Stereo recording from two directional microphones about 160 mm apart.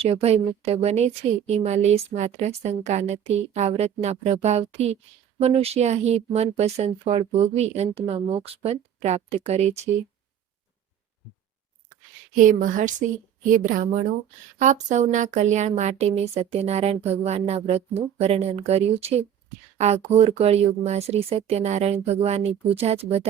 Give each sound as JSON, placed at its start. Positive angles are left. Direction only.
{"t": 0.0, "sound": "a woman's voice", "side_deg": -40}
{"t": 12.3, "sound": "a woman's voice", "side_deg": -55}
{"t": 14.6, "sound": "a woman's voice", "side_deg": -50}